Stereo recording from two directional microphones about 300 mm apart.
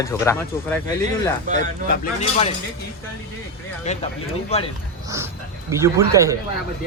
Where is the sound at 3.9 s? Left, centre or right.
Centre.